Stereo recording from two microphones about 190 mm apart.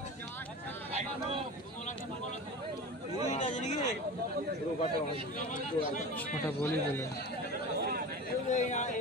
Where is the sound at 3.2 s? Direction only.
35° left (ahead or behind).